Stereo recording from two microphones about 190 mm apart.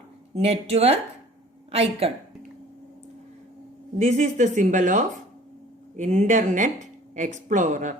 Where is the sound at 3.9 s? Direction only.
40° right (ahead or behind).